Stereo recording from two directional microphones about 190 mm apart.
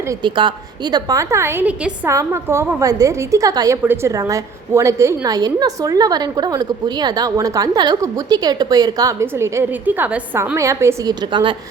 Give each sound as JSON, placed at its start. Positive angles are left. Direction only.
{"t": 0.1, "sound": "a woman's voice", "side_deg": -25}